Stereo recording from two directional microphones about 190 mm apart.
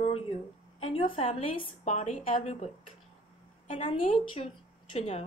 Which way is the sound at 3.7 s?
30° left (ahead or behind).